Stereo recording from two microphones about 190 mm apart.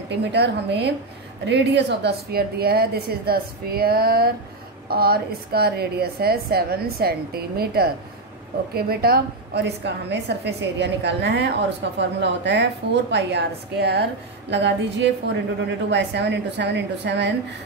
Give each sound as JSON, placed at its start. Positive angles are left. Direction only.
{"t": 0.2, "sound": "a woman's voice", "side_deg": -60}